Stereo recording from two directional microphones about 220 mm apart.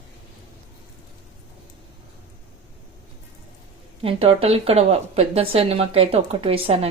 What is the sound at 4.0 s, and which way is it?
Speech, 25° right (ahead or behind).